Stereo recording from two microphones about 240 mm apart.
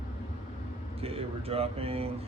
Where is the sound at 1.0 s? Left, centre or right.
Right.